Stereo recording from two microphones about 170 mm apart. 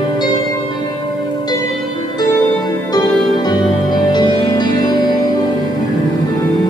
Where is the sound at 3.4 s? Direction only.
25° left (ahead or behind).